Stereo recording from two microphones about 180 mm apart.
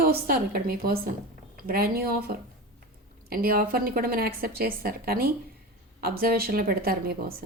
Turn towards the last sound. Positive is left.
turn(degrees=-55)  # may be behind; listen again after turning